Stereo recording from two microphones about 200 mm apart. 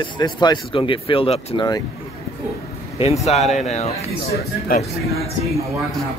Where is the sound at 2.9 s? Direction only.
30° left (ahead or behind).